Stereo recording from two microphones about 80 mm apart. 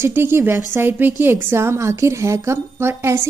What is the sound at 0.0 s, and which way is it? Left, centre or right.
A woman's voice, right.